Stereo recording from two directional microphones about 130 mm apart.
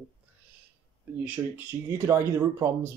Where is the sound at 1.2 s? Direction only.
15° right (ahead or behind).